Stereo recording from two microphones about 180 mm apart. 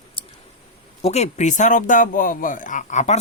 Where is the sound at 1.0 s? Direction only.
40° left (ahead or behind).